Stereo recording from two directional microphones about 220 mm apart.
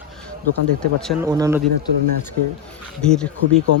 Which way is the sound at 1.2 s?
15° right (ahead or behind).